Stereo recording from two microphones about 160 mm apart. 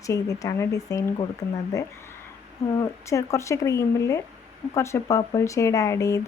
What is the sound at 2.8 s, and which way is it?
Speech, 20° left (ahead or behind).